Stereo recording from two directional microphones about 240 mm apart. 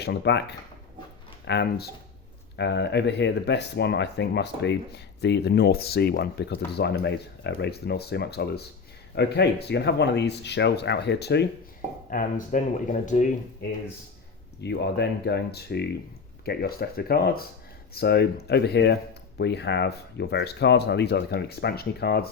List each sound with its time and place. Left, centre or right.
0.0 s speech: left
12.1 s speech: left
14.6 s speech: left